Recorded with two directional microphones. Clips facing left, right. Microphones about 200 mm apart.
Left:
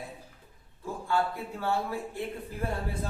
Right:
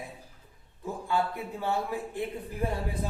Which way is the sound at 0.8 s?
15° right (ahead or behind).